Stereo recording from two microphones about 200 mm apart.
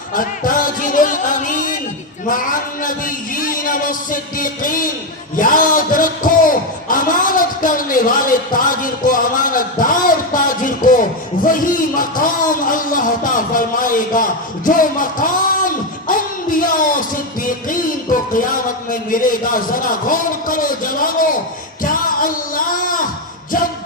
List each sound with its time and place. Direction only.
0.1 s music: 45° left (ahead or behind)
2.3 s a man's voice: 45° left (ahead or behind)
5.4 s a sound: 45° left (ahead or behind)
21.8 s music: 45° left (ahead or behind)